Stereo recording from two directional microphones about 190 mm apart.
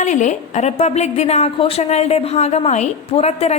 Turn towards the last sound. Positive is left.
turn(degrees=35)  # may be behind; listen again after turning